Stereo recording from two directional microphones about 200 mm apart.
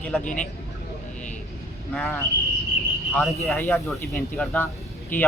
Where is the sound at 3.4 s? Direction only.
10° left (ahead or behind).